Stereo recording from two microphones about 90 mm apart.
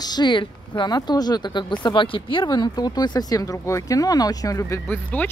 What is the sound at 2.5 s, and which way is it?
Speech, 50° left (ahead or behind).